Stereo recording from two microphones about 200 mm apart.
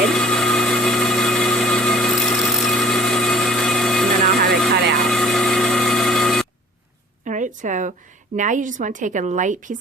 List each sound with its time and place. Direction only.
0.1 s engine: 5° left (ahead or behind)
4.2 s vehicle: 50° right (ahead or behind)
5.0 s vehicle: centre (ahead or behind)
7.3 s a sound: 40° right (ahead or behind)
8.4 s a woman's voice: 40° right (ahead or behind)